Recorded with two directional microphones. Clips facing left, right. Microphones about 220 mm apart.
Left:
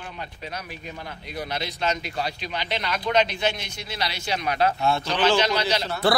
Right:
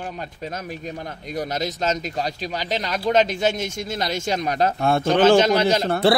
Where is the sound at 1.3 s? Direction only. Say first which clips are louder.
Right 5 dB; 45° right (ahead or behind).